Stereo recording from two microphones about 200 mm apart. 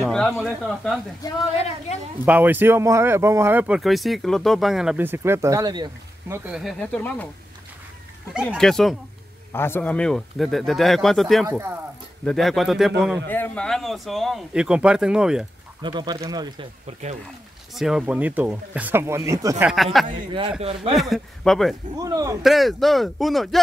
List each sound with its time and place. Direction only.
0.0 s speech: 5° left (ahead or behind)
2.2 s speech: 10° right (ahead or behind); by 7.2 s 5° left (ahead or behind)
8.5 s speech: centre (ahead or behind)
11.4 s speech: 10° right (ahead or behind)
12.3 s speech: centre (ahead or behind)
15.8 s speech: 20° right (ahead or behind)
17.7 s speech: 5° right (ahead or behind)
19.6 s speech: centre (ahead or behind)
21.9 s speech: 15° right (ahead or behind)
22.4 s speech: centre (ahead or behind)